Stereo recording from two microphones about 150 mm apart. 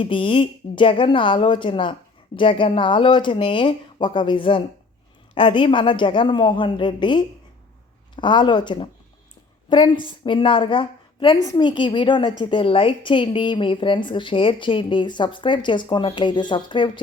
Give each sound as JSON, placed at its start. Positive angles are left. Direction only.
{"t": 0.0, "sound": "speech", "side_deg": 35}